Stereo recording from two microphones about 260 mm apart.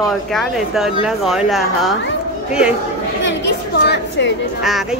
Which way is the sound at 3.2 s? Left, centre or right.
Left.